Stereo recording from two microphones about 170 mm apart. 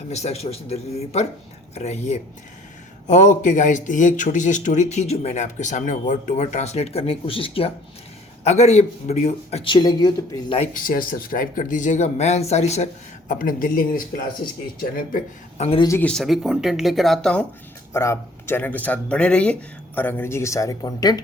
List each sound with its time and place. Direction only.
0.1 s a man's voice: 40° left (ahead or behind)
9.7 s speech: 25° left (ahead or behind)
10.8 s speech: 55° left (ahead or behind)
15.6 s a man's voice: 35° left (ahead or behind)
15.9 s speech: 10° left (ahead or behind)
17.9 s speech: 15° left (ahead or behind)